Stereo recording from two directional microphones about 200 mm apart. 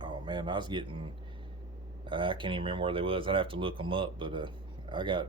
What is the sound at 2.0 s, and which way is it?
Speech, 25° right (ahead or behind).